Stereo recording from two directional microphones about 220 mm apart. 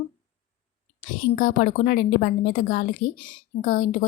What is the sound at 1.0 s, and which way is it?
Speech, 35° left (ahead or behind).